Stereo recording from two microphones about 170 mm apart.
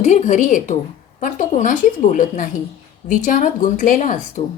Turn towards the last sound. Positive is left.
turn(degrees=50)  # may be behind; listen again after turning